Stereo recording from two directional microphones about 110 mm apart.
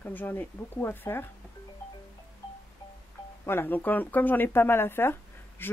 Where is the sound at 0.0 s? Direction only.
15° left (ahead or behind).